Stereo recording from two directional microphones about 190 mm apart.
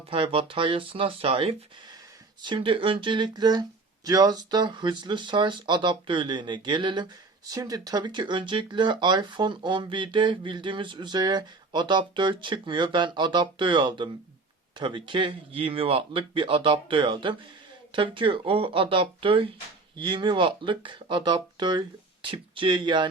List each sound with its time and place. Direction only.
0.1 s speech: 30° right (ahead or behind)